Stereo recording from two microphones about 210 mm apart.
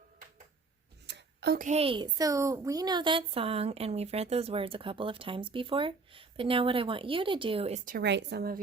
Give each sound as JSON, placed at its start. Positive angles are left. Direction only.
{"t": 1.0, "sound": "a sound", "side_deg": -55}
{"t": 1.6, "sound": "a woman's voice", "side_deg": -30}
{"t": 7.9, "sound": "a woman's voice", "side_deg": -50}